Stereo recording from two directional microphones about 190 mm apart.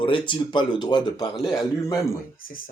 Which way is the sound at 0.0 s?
25° left (ahead or behind).